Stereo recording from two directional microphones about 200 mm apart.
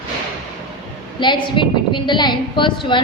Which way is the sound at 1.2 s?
25° left (ahead or behind).